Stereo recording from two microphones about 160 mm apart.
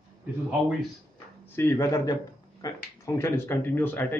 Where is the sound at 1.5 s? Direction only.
15° left (ahead or behind).